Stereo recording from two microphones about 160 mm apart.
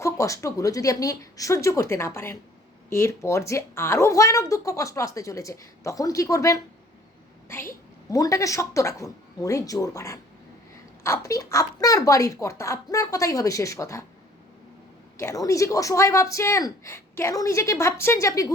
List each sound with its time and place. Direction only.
0.0 s speech: 20° left (ahead or behind)
15.2 s speech: 20° left (ahead or behind)